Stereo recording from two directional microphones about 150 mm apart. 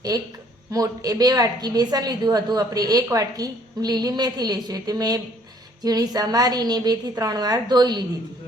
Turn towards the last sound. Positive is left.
turn(degrees=-30)  # may be behind; listen again after turning